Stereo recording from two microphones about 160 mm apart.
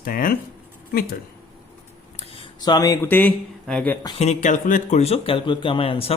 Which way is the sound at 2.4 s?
25° left (ahead or behind).